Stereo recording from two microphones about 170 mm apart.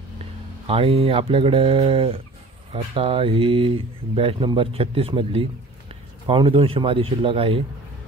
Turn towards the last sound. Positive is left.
turn(degrees=-35)  # may be behind; listen again after turning